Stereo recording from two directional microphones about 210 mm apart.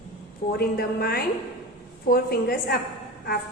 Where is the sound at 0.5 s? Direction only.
45° left (ahead or behind).